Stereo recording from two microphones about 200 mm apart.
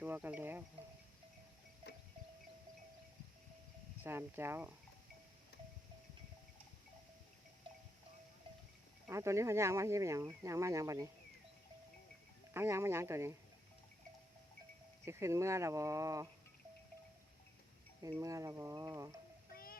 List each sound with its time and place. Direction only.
0.0 s speech: 10° right (ahead or behind)
4.0 s speech: 10° right (ahead or behind)
9.0 s speech: 15° right (ahead or behind)
12.5 s speech: 15° right (ahead or behind)
15.0 s speech: 15° right (ahead or behind)
18.2 s speech: 15° right (ahead or behind)
19.5 s child singing: 45° left (ahead or behind)